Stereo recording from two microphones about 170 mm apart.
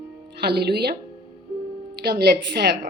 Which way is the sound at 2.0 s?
75° right (ahead or behind).